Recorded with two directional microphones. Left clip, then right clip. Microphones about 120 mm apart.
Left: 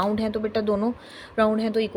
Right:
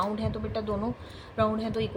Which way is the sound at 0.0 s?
85° left.